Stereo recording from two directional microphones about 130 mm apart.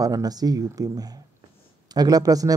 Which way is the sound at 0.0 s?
30° right (ahead or behind).